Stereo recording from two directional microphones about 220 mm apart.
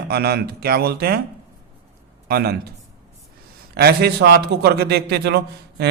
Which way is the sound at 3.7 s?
45° right (ahead or behind).